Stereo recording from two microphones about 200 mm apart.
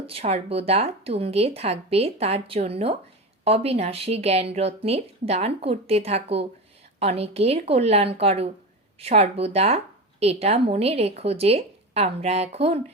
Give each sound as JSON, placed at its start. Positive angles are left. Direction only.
{"t": 0.1, "sound": "a woman's voice", "side_deg": -30}